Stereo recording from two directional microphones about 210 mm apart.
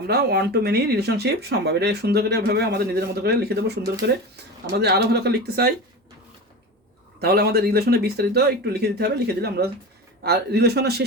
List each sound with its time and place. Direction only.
0.1 s speech: 50° right (ahead or behind)
7.2 s speech: 50° right (ahead or behind)